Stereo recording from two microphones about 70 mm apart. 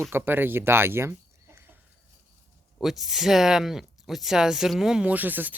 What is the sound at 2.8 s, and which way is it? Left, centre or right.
Speech, centre.